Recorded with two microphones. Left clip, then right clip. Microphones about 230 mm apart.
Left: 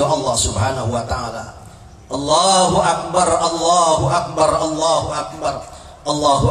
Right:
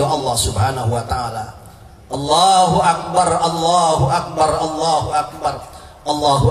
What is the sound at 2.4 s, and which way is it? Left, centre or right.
A man's voice, right.